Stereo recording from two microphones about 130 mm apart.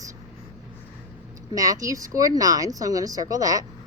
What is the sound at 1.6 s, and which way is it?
A woman's voice, 25° right (ahead or behind).